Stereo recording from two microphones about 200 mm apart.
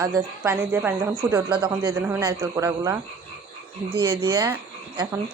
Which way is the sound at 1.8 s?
15° right (ahead or behind).